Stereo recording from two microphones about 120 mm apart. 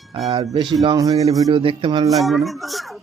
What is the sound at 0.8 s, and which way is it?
Speech, 30° right (ahead or behind).